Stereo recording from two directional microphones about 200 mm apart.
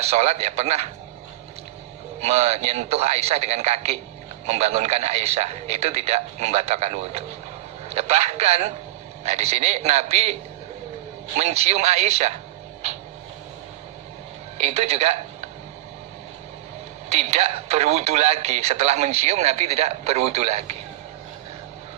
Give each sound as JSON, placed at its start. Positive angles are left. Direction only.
{"t": 0.0, "sound": "speech", "side_deg": -30}
{"t": 2.2, "sound": "speech", "side_deg": -30}
{"t": 11.3, "sound": "speech", "side_deg": -30}
{"t": 14.6, "sound": "a man's voice", "side_deg": -30}
{"t": 17.1, "sound": "speech", "side_deg": -35}